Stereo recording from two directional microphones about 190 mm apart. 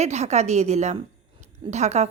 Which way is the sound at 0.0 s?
35° right (ahead or behind).